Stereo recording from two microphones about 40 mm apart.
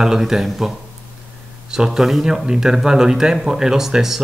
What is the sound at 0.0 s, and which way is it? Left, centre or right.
Speech, centre.